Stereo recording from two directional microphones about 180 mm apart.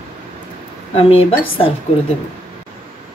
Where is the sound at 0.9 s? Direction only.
30° left (ahead or behind).